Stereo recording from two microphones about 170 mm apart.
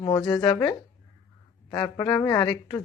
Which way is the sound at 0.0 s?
25° left (ahead or behind).